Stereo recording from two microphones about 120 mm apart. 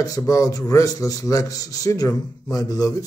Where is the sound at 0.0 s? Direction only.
30° left (ahead or behind).